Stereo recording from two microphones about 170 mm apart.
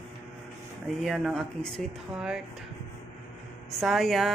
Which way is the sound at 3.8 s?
Centre (ahead or behind).